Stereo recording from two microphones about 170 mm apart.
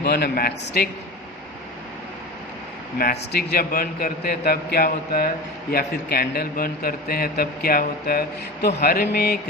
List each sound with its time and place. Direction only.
0.0 s a man's voice: 65° left (ahead or behind)
3.0 s a man's voice: 65° left (ahead or behind)